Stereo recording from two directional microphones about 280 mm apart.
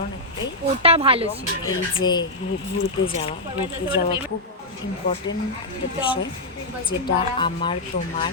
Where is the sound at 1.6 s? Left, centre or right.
Centre.